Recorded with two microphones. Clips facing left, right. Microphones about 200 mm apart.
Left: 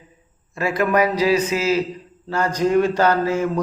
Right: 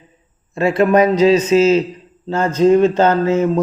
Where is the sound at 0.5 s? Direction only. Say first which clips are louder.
Right 6 dB; 25° right (ahead or behind).